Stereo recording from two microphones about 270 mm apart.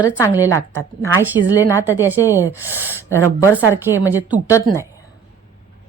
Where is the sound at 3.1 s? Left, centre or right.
Centre.